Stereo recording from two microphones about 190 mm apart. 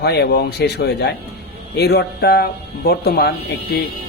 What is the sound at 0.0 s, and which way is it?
Speech, 60° left (ahead or behind).